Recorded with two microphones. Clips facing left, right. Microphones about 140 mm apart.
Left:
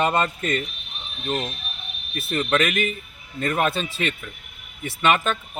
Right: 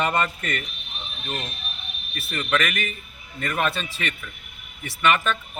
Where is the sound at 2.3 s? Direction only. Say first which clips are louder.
Left 3 dB; 25° left (ahead or behind).